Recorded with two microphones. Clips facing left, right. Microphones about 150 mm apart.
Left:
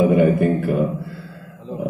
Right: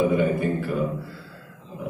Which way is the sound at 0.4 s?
55° left (ahead or behind).